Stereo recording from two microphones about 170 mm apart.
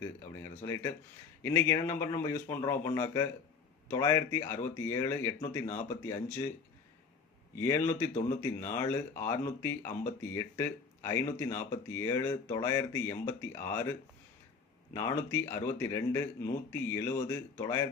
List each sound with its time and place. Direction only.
0.0 s speech: 15° left (ahead or behind)
7.5 s speech: 15° left (ahead or behind)
14.9 s speech: 15° left (ahead or behind)